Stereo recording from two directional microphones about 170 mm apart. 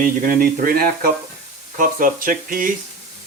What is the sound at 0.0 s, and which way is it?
Speech, 55° right (ahead or behind).